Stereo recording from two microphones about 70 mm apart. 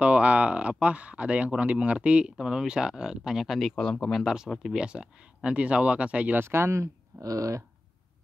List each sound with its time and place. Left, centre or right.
0.0 s speech: centre
3.7 s speech: centre
4.7 s speech: centre
6.4 s speech: right
7.2 s a sound: right